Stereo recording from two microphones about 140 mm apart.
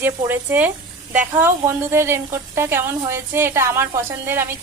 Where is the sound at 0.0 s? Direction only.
15° right (ahead or behind).